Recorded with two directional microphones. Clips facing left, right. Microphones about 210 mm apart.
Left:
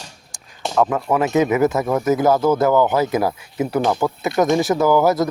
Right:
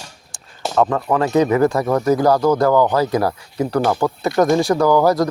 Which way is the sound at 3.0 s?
20° left (ahead or behind).